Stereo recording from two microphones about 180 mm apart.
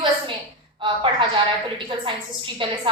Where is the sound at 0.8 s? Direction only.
25° right (ahead or behind).